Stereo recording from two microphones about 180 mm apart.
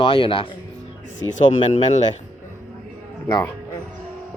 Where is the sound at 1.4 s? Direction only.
40° left (ahead or behind).